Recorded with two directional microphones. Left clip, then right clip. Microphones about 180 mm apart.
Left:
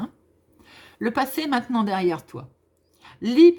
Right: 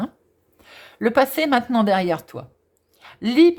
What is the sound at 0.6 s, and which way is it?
A woman's voice, 30° right (ahead or behind).